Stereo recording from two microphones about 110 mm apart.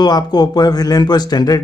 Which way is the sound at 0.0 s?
40° left (ahead or behind).